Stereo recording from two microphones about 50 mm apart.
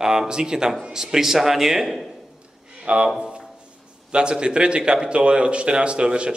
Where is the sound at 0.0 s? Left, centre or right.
Centre.